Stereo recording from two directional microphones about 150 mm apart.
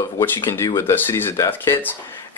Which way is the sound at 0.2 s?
15° left (ahead or behind).